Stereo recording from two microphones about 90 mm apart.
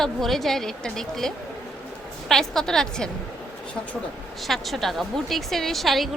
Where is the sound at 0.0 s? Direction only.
Centre (ahead or behind).